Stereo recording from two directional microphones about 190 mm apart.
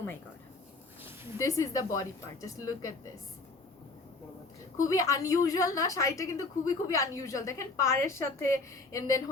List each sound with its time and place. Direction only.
1.4 s a woman's voice: 15° left (ahead or behind)
4.9 s a woman's voice: 15° left (ahead or behind)